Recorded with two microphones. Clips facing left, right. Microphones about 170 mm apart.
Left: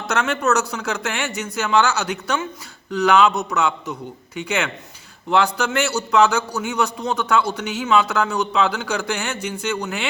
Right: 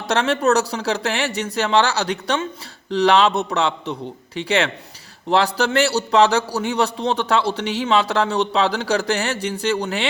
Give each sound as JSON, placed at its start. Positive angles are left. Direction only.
{"t": 0.1, "sound": "a man's voice", "side_deg": -35}